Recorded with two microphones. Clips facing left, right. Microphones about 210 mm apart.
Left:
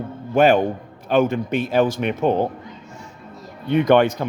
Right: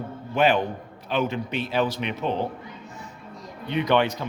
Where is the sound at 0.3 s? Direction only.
45° left (ahead or behind).